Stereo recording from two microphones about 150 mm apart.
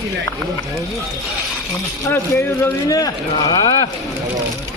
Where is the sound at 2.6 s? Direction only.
25° left (ahead or behind).